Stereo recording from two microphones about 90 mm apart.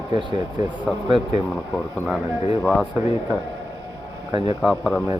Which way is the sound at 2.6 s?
10° left (ahead or behind).